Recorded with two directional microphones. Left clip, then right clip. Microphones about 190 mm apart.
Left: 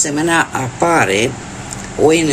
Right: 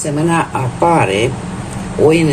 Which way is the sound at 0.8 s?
35° left (ahead or behind).